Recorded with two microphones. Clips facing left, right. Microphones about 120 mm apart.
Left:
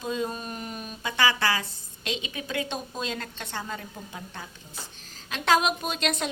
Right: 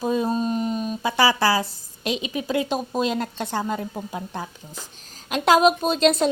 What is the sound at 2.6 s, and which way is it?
A woman's voice, 40° right (ahead or behind).